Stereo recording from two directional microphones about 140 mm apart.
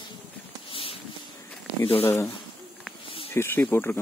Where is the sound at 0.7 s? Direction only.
40° left (ahead or behind).